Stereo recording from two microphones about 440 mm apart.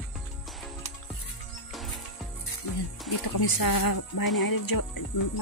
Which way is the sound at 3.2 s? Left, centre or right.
Left.